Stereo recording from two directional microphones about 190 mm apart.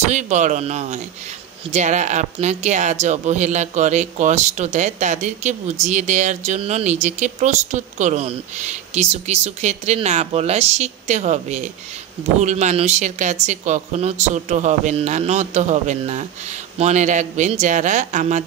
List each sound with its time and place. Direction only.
0.0 s speech: 40° right (ahead or behind)